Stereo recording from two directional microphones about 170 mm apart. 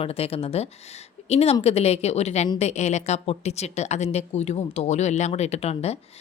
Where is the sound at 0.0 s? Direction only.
35° left (ahead or behind).